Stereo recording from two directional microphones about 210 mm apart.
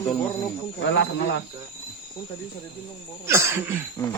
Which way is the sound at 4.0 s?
15° left (ahead or behind).